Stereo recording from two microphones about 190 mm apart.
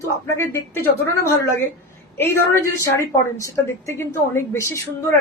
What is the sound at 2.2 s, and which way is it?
A woman's voice, 15° left (ahead or behind).